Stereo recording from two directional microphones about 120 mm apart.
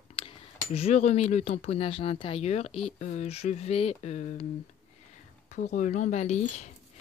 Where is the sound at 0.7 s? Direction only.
60° left (ahead or behind).